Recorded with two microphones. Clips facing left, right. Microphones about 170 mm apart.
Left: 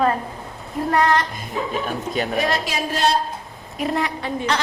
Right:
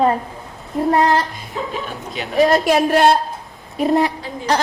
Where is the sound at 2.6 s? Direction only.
60° right (ahead or behind).